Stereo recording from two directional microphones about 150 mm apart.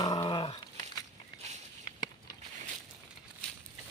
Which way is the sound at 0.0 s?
30° left (ahead or behind).